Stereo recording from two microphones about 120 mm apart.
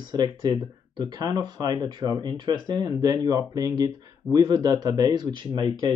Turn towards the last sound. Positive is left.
turn(degrees=-35)  # may be behind; listen again after turning